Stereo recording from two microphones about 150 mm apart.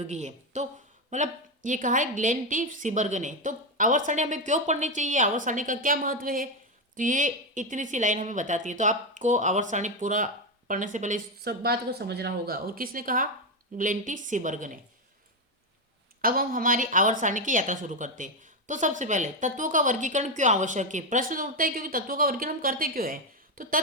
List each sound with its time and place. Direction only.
0.1 s a woman's voice: 50° right (ahead or behind)
16.2 s a woman's voice: 70° right (ahead or behind)